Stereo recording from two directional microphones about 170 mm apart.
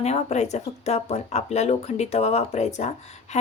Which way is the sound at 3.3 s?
45° left (ahead or behind).